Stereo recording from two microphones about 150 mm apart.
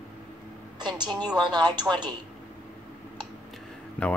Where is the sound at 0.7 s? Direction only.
30° right (ahead or behind).